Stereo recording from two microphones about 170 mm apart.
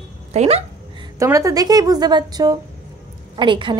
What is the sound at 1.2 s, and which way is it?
A woman's voice, 20° right (ahead or behind).